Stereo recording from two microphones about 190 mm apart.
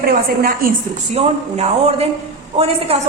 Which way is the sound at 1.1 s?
35° right (ahead or behind).